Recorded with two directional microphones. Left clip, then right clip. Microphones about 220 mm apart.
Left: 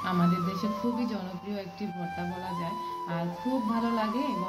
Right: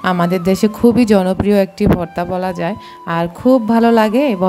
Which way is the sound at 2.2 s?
50° right (ahead or behind).